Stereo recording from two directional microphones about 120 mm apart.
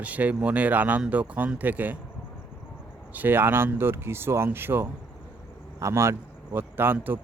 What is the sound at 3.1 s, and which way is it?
Speech, 15° right (ahead or behind).